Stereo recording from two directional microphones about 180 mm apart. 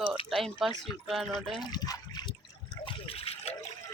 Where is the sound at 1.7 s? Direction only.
20° left (ahead or behind).